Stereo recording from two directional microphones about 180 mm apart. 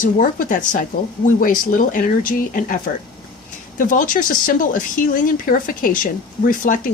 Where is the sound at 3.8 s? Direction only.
50° left (ahead or behind).